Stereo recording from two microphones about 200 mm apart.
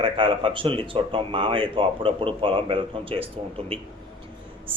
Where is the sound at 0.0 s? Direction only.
25° right (ahead or behind).